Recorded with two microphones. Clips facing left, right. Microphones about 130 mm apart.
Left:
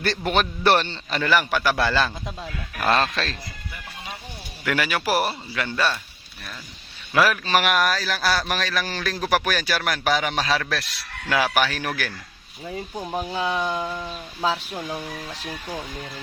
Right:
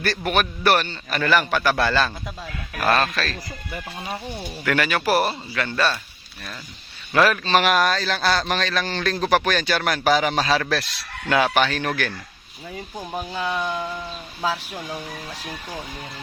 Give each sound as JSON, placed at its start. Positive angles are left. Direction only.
{"t": 0.0, "sound": "a man's voice", "side_deg": 20}
{"t": 1.2, "sound": "a man's voice", "side_deg": 15}
{"t": 4.6, "sound": "a man's voice", "side_deg": 10}
{"t": 7.1, "sound": "a man's voice", "side_deg": 5}